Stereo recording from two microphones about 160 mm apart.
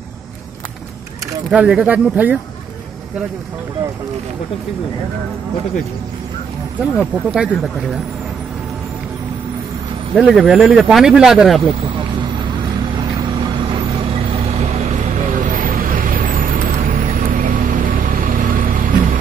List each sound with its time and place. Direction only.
1.5 s speech: 5° right (ahead or behind)
7.0 s speech: 5° right (ahead or behind)
10.1 s speech: 5° right (ahead or behind)
13.7 s vehicle: 40° right (ahead or behind); by 18.9 s 60° right (ahead or behind)